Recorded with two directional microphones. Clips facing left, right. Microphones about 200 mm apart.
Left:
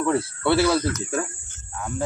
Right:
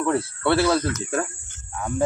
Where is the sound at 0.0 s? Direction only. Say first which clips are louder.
Even; 10° left (ahead or behind).